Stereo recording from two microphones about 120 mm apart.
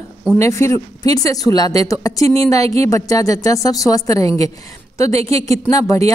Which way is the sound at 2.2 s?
55° right (ahead or behind).